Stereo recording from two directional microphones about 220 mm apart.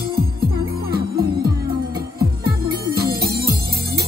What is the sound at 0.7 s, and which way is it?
Music, 45° right (ahead or behind).